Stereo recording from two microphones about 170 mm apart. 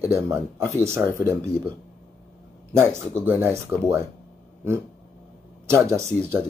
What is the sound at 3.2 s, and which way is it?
Speech, 10° right (ahead or behind).